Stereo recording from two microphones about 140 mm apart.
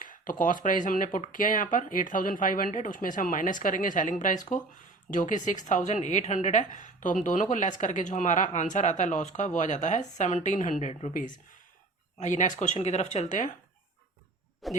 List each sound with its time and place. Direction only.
0.0 s speech: 75° left (ahead or behind); by 11.1 s 55° left (ahead or behind)
12.2 s speech: 60° left (ahead or behind)
14.6 s speech: centre (ahead or behind)